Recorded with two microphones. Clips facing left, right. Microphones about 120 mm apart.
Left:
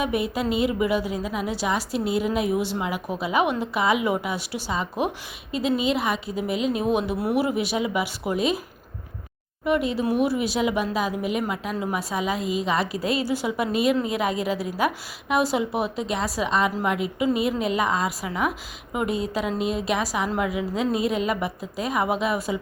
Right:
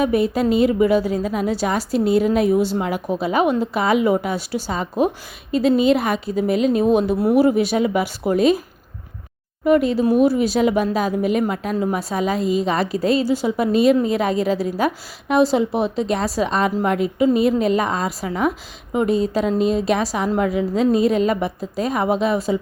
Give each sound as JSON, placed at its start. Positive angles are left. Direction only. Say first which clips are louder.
{"t": 0.0, "sound": "speech", "louder": "right 7 dB", "side_deg": -40}
{"t": 9.6, "sound": "speech", "louder": "right 7 dB", "side_deg": -40}